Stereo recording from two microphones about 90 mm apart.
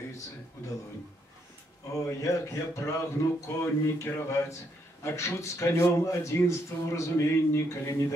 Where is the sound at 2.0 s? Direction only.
35° left (ahead or behind).